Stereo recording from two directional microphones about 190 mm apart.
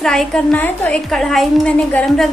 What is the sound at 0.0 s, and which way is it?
A woman's voice, centre (ahead or behind).